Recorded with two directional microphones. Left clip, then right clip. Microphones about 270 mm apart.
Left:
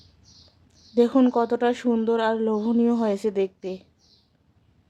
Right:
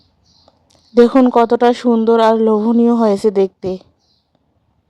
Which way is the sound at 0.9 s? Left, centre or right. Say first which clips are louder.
Right 10 dB; right.